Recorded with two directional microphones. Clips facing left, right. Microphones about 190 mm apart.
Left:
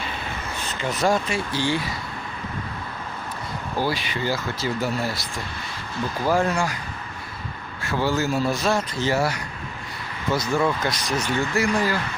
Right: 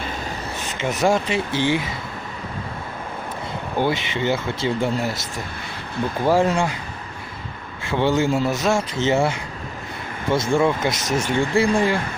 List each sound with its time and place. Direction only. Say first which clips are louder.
0.8 s speech: right 3 dB; 20° right (ahead or behind)
3.8 s speech: right 4 dB; 20° right (ahead or behind)
7.9 s speech: right 4 dB; 25° right (ahead or behind)